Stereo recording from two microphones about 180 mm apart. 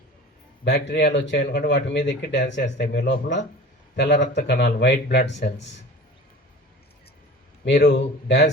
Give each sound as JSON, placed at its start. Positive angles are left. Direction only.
{"t": 0.6, "sound": "speech", "side_deg": 75}
{"t": 2.8, "sound": "speech", "side_deg": 60}
{"t": 7.6, "sound": "speech", "side_deg": 75}